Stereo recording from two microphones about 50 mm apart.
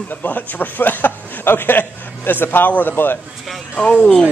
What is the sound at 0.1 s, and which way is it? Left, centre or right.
A man's voice, left.